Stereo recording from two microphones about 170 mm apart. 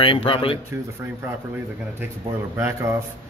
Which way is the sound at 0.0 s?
30° left (ahead or behind).